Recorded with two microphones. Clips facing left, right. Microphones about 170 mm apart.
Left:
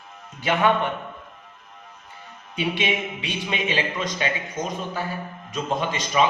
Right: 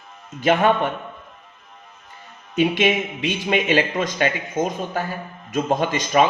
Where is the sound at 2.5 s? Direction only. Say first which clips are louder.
Right 7 dB; 45° right (ahead or behind).